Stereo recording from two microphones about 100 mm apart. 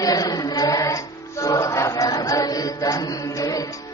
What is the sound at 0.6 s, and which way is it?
Music, 40° left (ahead or behind).